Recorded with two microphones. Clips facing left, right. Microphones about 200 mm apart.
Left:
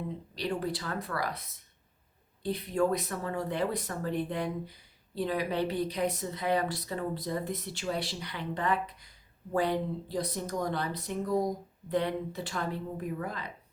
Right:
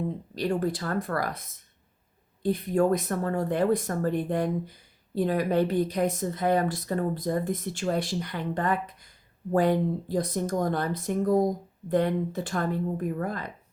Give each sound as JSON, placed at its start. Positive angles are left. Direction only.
{"t": 0.3, "sound": "speech", "side_deg": -50}